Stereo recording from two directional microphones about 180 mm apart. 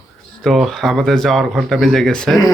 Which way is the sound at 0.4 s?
Centre (ahead or behind).